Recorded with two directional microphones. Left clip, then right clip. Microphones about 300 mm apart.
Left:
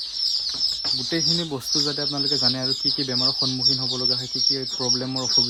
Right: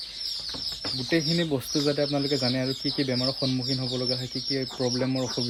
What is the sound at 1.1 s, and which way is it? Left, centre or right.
Speech, centre.